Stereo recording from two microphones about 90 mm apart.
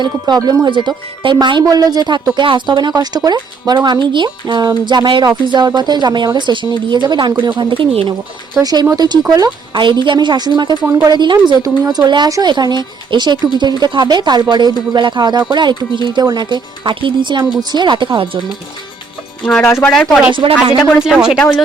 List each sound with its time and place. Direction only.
0.0 s speech: 50° right (ahead or behind)
0.7 s speech: 65° right (ahead or behind)
1.6 s speech: 40° right (ahead or behind)
2.3 s speech: 60° right (ahead or behind)
3.8 s speech: 60° right (ahead or behind)
5.2 s speech: 50° right (ahead or behind); by 8.1 s 70° right (ahead or behind)
8.6 s speech: 45° right (ahead or behind)
9.8 s speech: 60° right (ahead or behind)
11.6 s speech: 50° right (ahead or behind); by 18.3 s 65° right (ahead or behind)
19.6 s speech: 25° left (ahead or behind)
20.3 s speech: 65° right (ahead or behind)
20.7 s speech: 5° right (ahead or behind)